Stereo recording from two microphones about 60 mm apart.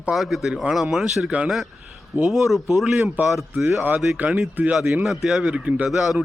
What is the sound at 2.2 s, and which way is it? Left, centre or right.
Speech, centre.